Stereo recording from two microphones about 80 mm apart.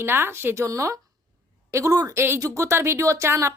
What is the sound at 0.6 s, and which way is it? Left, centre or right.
A woman's voice, right.